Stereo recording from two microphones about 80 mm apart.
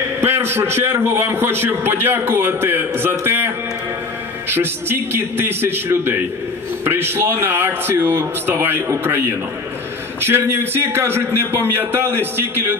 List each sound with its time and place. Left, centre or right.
0.2 s a man's voice: right